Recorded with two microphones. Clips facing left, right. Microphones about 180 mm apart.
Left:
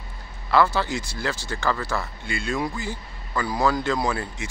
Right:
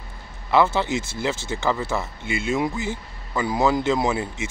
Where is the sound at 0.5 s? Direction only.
20° right (ahead or behind).